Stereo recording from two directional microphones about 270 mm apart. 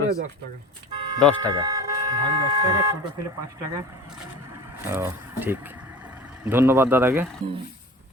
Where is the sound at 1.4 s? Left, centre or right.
Centre.